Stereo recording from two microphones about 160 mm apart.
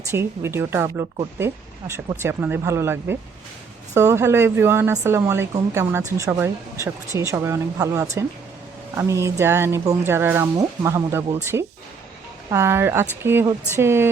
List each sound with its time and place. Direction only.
0.1 s a woman's voice: 15° right (ahead or behind)
2.1 s a woman's voice: 15° right (ahead or behind)